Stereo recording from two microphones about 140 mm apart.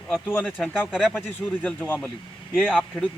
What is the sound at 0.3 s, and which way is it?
Speech, 10° left (ahead or behind).